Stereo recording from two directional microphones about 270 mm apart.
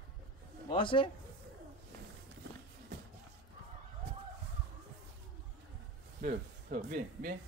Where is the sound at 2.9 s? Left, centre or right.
Right.